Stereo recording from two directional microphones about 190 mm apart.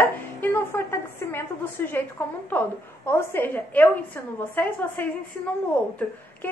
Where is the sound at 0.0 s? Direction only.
10° left (ahead or behind).